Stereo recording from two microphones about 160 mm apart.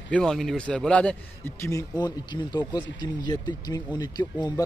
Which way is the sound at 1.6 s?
20° left (ahead or behind).